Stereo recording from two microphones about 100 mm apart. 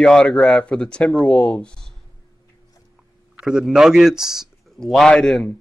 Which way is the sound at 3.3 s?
5° right (ahead or behind).